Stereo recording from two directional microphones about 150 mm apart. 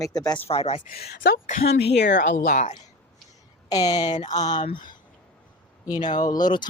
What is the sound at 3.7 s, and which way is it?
Speech, 25° left (ahead or behind).